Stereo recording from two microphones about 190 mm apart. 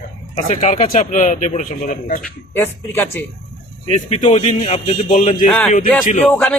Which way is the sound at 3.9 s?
35° left (ahead or behind).